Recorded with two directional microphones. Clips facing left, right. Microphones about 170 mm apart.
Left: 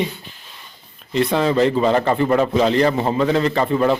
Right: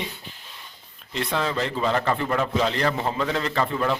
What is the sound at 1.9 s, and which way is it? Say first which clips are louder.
Speech: left 7 dB; 25° left (ahead or behind).